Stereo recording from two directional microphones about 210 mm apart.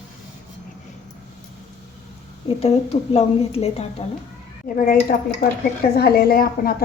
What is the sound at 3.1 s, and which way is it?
Speech, 30° left (ahead or behind).